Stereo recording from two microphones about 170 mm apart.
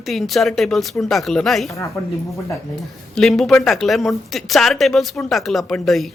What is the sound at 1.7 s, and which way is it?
Speech, 20° left (ahead or behind).